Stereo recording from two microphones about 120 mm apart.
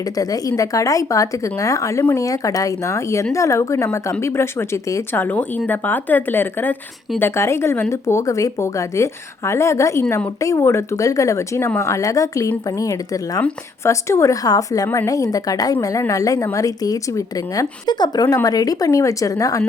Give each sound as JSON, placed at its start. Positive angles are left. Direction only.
{"t": 0.2, "sound": "a woman's voice", "side_deg": 30}